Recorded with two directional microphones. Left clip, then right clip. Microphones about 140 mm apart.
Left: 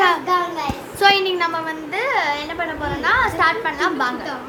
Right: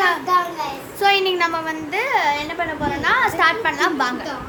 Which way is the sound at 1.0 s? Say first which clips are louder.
Left 1 dB; 20° right (ahead or behind).